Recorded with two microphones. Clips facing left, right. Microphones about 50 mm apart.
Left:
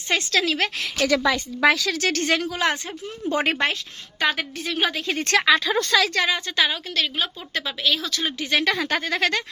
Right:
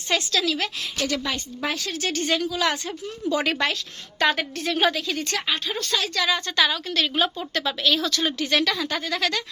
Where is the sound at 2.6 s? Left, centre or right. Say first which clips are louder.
Left 1 dB; left.